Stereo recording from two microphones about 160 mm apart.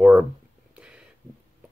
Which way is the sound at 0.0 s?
10° right (ahead or behind).